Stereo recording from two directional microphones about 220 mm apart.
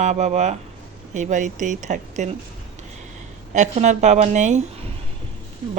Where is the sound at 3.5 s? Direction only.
35° right (ahead or behind).